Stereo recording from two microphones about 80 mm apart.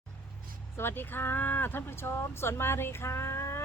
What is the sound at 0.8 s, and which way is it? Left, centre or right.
Speech, left.